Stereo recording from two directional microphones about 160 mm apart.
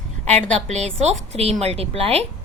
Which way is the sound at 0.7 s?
45° right (ahead or behind).